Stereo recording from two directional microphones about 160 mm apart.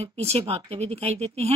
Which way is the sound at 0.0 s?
40° right (ahead or behind).